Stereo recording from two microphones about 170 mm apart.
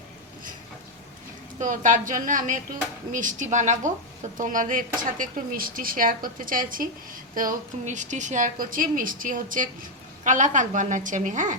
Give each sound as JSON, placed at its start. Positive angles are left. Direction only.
{"t": 1.5, "sound": "a woman's voice", "side_deg": -45}